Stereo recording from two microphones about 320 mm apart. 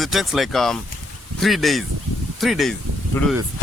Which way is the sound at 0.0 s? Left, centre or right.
Centre.